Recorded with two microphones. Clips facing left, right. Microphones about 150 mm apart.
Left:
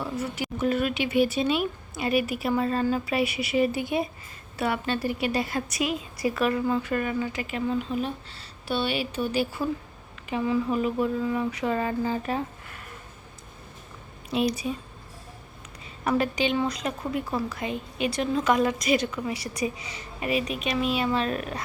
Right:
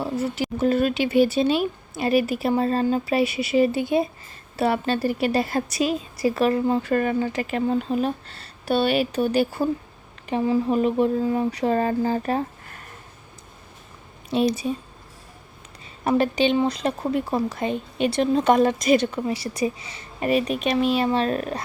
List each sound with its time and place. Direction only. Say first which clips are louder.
0.0 s a woman's voice: right 5 dB; 30° right (ahead or behind); by 9.6 s 45° right (ahead or behind)
10.2 s speech: right 4 dB; 35° right (ahead or behind)
14.3 s a woman's voice: right 4 dB; 25° right (ahead or behind)
16.0 s speech: right 5 dB; 30° right (ahead or behind)
20.1 s a woman's voice: right 6 dB; 40° right (ahead or behind)